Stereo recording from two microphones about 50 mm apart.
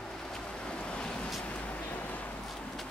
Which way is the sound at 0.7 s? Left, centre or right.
Left.